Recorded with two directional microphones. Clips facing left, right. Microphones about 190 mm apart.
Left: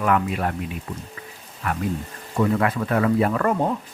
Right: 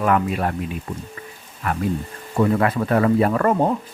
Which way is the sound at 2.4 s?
35° right (ahead or behind).